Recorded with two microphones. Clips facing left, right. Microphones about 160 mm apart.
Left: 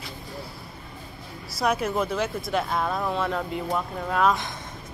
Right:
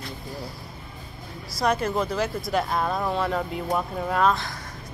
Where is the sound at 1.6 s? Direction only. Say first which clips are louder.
Right 1 dB; 5° left (ahead or behind).